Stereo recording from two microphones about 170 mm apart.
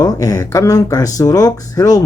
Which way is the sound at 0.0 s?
20° left (ahead or behind).